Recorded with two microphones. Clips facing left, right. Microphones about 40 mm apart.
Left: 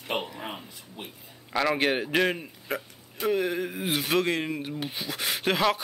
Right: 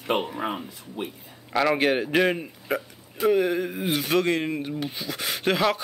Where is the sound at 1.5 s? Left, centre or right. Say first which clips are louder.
Right 3 dB; centre.